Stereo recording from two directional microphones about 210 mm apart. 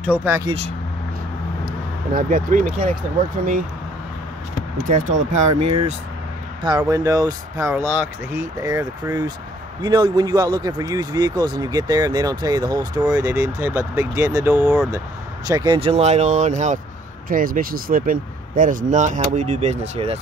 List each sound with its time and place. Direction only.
0.0 s speech: 10° right (ahead or behind)
1.7 s speech: 40° right (ahead or behind)
4.8 s speech: 40° right (ahead or behind)
6.8 s speech: 15° right (ahead or behind); by 20.2 s 30° right (ahead or behind)